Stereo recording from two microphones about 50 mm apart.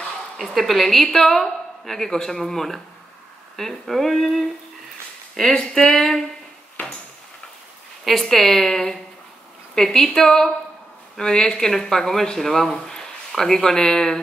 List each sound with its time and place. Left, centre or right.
0.4 s a woman's voice: centre
3.5 s a sound: centre
8.0 s a woman's voice: centre